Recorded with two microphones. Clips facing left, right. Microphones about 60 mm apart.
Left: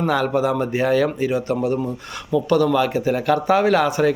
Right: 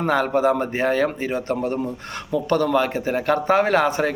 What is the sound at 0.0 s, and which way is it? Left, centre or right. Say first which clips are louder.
Speech: even; right.